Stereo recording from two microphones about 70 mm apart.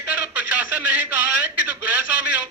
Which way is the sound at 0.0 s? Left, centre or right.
Right.